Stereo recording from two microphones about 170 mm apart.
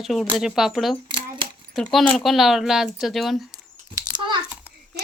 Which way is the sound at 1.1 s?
30° right (ahead or behind).